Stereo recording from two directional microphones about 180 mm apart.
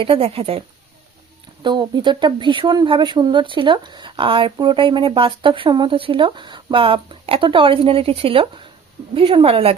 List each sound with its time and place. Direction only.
0.0 s a woman's voice: 30° right (ahead or behind)
1.6 s a woman's voice: 25° right (ahead or behind)